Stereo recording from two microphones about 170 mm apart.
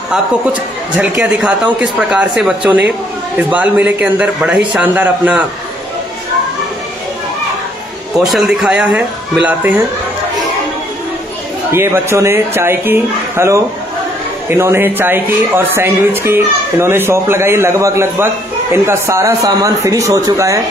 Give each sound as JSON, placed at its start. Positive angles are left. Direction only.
{"t": 0.9, "sound": "a man's voice", "side_deg": -5}
{"t": 8.2, "sound": "speech", "side_deg": 0}
{"t": 11.7, "sound": "a man's voice", "side_deg": -15}